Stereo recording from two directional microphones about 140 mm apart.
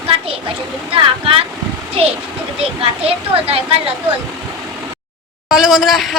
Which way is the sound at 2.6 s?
45° right (ahead or behind).